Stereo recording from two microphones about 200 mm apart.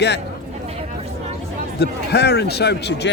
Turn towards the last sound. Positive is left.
turn(degrees=55)  # may be behind; listen again after turning